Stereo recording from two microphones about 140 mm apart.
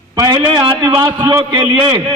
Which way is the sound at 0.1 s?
25° right (ahead or behind).